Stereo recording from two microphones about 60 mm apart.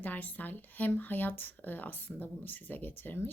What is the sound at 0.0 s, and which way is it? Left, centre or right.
Speech, left.